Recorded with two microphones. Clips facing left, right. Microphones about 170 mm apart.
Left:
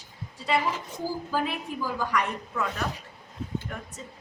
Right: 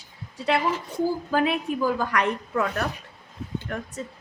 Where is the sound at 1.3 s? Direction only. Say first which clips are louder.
Right 6 dB; 65° right (ahead or behind).